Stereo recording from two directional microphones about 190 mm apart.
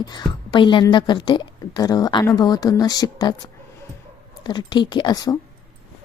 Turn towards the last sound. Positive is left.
turn(degrees=20)  # may be behind; listen again after turning